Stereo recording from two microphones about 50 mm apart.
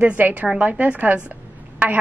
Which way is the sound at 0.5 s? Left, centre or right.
Right.